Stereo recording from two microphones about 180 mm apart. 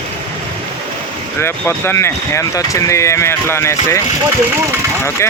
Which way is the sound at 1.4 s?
15° left (ahead or behind).